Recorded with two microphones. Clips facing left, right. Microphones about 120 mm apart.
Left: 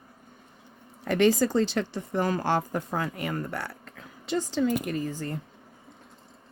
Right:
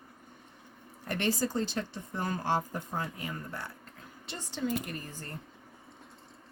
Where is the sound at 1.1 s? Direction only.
90° left.